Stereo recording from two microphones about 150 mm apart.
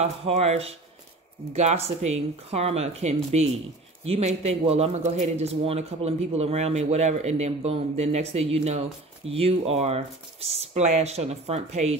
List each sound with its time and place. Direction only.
0.0 s a man's voice: 40° right (ahead or behind)